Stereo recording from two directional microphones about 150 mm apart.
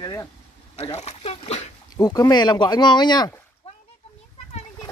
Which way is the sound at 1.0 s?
45° left (ahead or behind).